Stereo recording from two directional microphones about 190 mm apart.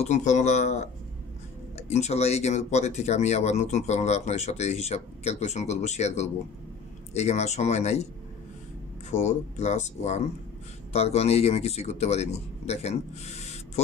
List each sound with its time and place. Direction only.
0.0 s speech: 40° left (ahead or behind)
9.1 s speech: 35° left (ahead or behind)